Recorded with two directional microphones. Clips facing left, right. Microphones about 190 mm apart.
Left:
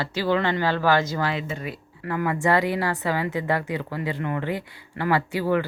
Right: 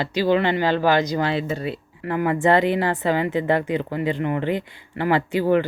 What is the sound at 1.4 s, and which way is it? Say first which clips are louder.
Speech: right 6 dB; 35° right (ahead or behind).